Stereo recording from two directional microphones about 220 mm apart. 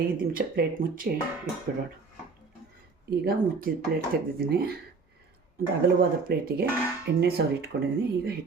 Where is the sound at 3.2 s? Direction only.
40° right (ahead or behind).